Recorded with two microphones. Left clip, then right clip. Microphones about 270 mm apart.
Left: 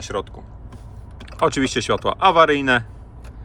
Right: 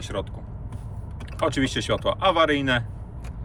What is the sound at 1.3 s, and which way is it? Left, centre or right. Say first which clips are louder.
Speech: left 5 dB; centre.